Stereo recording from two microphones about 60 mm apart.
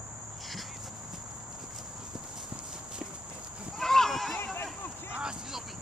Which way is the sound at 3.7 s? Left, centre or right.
Centre.